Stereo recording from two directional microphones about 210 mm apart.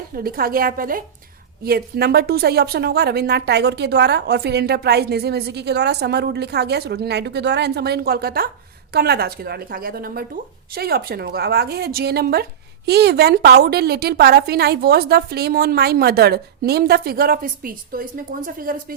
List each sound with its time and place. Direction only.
0.2 s a woman's voice: 45° right (ahead or behind)